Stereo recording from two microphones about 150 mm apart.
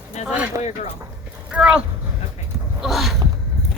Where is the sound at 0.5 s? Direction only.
20° right (ahead or behind).